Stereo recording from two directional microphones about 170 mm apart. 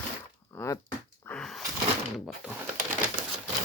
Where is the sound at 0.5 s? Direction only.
15° left (ahead or behind).